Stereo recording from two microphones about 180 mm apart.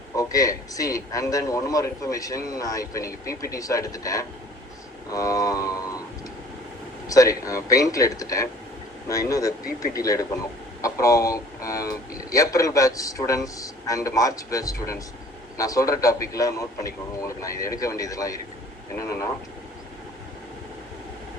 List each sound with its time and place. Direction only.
0.2 s speech: 20° left (ahead or behind)
7.1 s speech: 20° left (ahead or behind)